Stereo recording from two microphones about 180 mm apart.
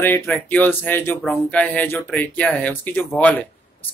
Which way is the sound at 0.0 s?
10° left (ahead or behind).